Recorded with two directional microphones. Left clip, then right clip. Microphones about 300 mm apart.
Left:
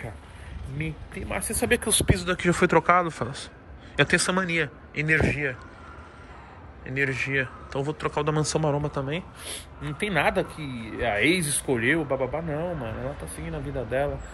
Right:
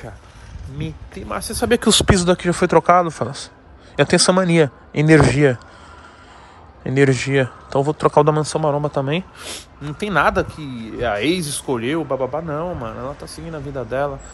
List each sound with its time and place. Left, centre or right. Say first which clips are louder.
0.7 s speech: right 3 dB; centre
1.7 s speech: right 9 dB; right
2.2 s speech: right 6 dB; centre
6.8 s speech: right 10 dB; centre
9.0 s speech: right 8 dB; right